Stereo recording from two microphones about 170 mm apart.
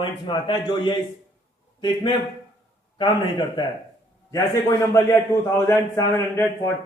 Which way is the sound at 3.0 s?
25° left (ahead or behind).